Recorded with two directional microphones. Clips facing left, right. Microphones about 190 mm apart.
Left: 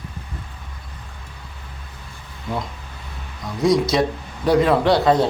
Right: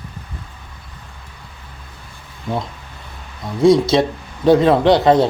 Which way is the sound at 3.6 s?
25° right (ahead or behind).